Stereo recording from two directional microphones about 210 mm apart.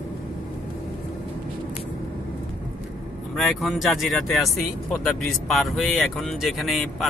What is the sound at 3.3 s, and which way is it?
Speech, centre (ahead or behind).